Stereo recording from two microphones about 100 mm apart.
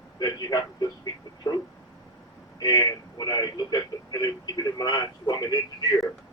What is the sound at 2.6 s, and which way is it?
Speech, 40° left (ahead or behind).